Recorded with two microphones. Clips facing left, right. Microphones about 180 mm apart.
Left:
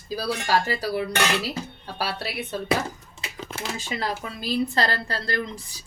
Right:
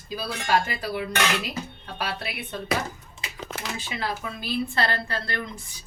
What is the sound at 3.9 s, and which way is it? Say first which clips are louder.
A woman's voice: left 1 dB; 35° left (ahead or behind).